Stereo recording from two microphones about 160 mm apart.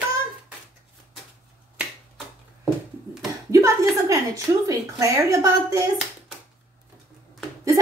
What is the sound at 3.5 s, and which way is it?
A woman's voice, 20° right (ahead or behind).